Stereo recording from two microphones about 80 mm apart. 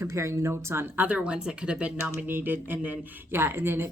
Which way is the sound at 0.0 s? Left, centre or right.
Right.